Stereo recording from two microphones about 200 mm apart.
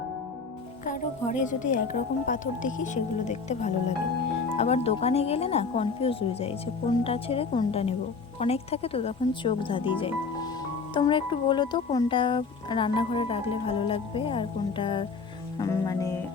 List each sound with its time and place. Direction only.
0.9 s a woman's voice: 40° left (ahead or behind); by 16.2 s 15° left (ahead or behind)